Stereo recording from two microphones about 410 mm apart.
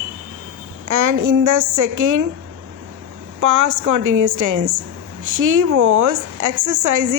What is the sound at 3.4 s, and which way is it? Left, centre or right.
A woman's voice, right.